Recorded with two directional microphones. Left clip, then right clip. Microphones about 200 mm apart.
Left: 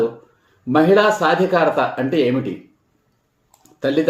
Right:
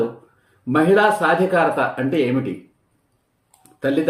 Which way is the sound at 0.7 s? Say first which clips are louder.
Left 2 dB; 5° left (ahead or behind).